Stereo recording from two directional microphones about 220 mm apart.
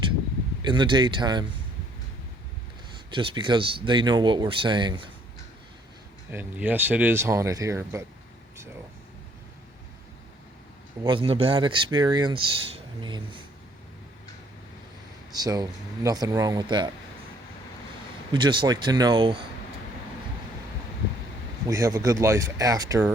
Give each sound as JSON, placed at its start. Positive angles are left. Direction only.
{"t": 0.6, "sound": "speech", "side_deg": -20}
{"t": 3.1, "sound": "speech", "side_deg": -20}
{"t": 6.3, "sound": "speech", "side_deg": -10}
{"t": 11.0, "sound": "speech", "side_deg": -25}
{"t": 15.3, "sound": "speech", "side_deg": -15}
{"t": 18.3, "sound": "speech", "side_deg": -20}
{"t": 21.7, "sound": "speech", "side_deg": -15}